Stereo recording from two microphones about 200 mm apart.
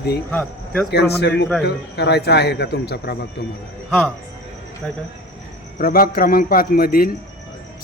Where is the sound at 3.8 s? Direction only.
Centre (ahead or behind).